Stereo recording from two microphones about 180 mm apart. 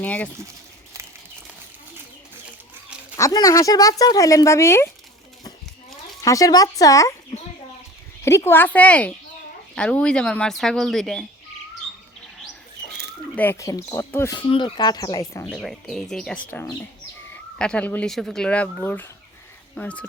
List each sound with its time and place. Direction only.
0.0 s speech: 10° left (ahead or behind)
3.2 s speech: 20° left (ahead or behind)
6.2 s speech: 20° left (ahead or behind)
8.2 s speech: 15° left (ahead or behind)
13.3 s speech: 10° left (ahead or behind)
14.3 s speech: 25° left (ahead or behind)
15.4 s speech: centre (ahead or behind)